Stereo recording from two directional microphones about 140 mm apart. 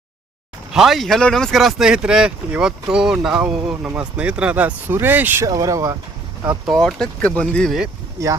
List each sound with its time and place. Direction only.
0.7 s speech: centre (ahead or behind)
5.5 s speech: 25° right (ahead or behind)
6.7 s speech: 5° left (ahead or behind)